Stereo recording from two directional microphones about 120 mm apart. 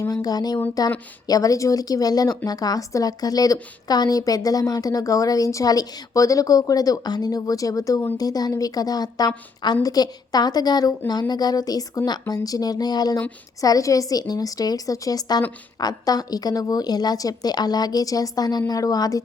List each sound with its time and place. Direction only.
0.0 s a woman's voice: 30° left (ahead or behind)